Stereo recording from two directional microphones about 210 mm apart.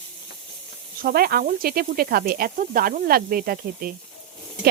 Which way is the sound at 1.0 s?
45° right (ahead or behind).